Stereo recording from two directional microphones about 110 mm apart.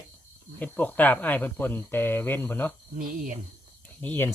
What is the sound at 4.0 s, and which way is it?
Speech, 15° left (ahead or behind).